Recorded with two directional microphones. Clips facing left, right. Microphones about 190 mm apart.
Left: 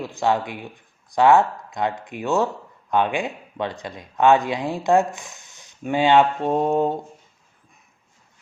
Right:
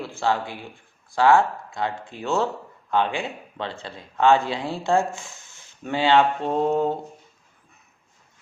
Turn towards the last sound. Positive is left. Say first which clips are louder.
# left 2 dB
turn(degrees=15)  # may be behind; listen again after turning